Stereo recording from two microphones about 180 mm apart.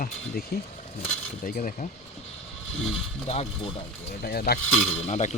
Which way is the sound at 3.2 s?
35° left (ahead or behind).